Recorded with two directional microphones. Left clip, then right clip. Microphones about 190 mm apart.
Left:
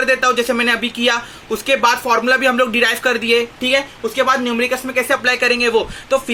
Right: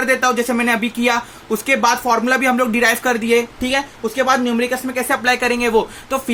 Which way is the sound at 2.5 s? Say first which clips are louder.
Left 2 dB; 40° right (ahead or behind).